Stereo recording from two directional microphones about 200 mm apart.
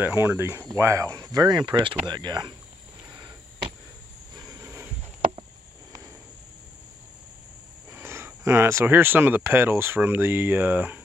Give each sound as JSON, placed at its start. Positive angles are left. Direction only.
{"t": 0.0, "sound": "speech", "side_deg": -10}
{"t": 3.2, "sound": "a sound", "side_deg": -20}
{"t": 7.9, "sound": "speech", "side_deg": -10}